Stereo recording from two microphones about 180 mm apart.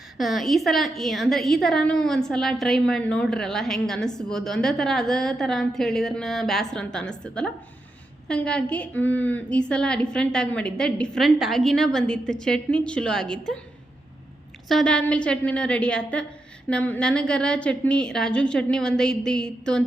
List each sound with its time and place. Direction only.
0.2 s a woman's voice: centre (ahead or behind)
14.7 s a woman's voice: 5° left (ahead or behind)